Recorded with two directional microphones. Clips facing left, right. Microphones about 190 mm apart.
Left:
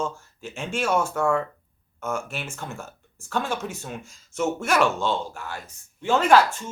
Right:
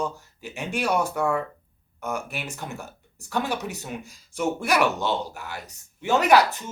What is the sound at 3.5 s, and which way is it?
Speech, 70° right (ahead or behind).